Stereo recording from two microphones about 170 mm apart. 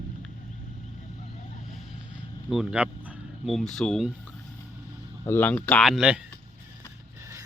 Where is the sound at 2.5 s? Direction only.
5° right (ahead or behind).